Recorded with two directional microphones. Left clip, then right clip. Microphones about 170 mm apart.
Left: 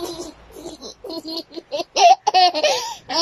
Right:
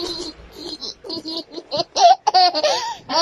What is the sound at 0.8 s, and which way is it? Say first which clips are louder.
Laughter: right 1 dB; 15° left (ahead or behind).